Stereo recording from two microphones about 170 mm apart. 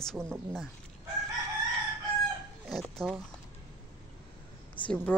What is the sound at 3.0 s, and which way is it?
Speech, centre (ahead or behind).